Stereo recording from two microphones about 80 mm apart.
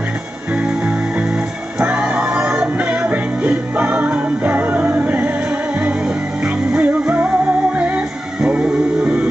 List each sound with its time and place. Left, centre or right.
1.8 s music: centre